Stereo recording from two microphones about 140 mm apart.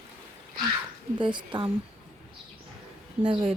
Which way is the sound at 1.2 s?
35° right (ahead or behind).